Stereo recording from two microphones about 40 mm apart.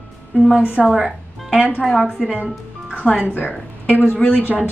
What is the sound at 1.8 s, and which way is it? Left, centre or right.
A woman's voice, centre.